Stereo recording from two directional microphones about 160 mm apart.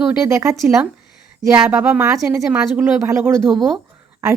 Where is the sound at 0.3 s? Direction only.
20° right (ahead or behind).